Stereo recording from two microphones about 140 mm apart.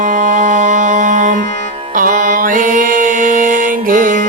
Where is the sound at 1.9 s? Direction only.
70° right (ahead or behind).